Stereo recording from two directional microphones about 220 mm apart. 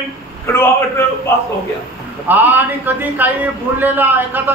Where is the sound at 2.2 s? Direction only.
10° right (ahead or behind).